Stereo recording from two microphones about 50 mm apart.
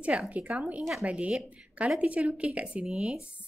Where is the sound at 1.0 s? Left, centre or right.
Right.